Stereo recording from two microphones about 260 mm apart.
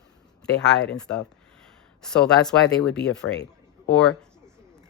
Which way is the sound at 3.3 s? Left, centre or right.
Left.